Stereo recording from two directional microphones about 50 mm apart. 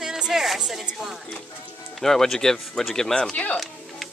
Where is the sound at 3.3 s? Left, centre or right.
Left.